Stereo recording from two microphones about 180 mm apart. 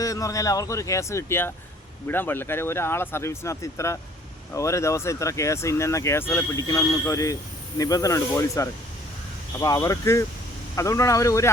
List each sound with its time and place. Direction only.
0.0 s speech: 20° left (ahead or behind)